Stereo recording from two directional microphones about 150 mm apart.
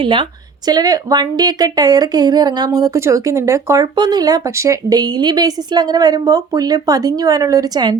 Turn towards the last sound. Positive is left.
turn(degrees=-30)  # may be behind; listen again after turning